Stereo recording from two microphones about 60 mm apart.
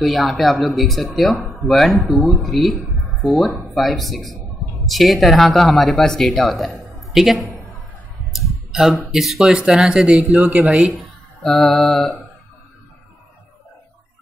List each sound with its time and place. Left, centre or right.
0.0 s speech: centre
6.7 s a sound: centre
8.3 s clicking: centre
9.1 s speech: centre; by 10.9 s right
11.4 s speech: centre